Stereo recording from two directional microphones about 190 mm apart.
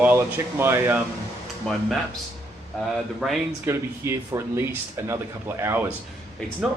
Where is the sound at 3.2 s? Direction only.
Centre (ahead or behind).